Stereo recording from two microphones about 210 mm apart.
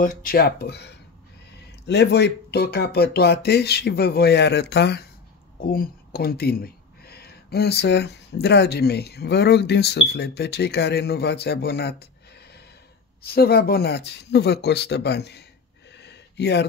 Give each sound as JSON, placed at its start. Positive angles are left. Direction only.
{"t": 0.0, "sound": "speech", "side_deg": 40}
{"t": 13.2, "sound": "speech", "side_deg": 45}
{"t": 15.9, "sound": "a sound", "side_deg": 55}